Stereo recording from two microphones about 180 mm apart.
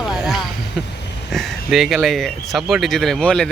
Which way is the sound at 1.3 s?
Centre (ahead or behind).